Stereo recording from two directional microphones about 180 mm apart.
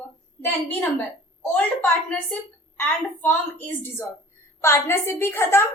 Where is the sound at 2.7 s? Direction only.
10° left (ahead or behind).